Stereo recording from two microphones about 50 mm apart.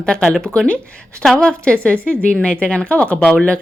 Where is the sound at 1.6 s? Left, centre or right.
Left.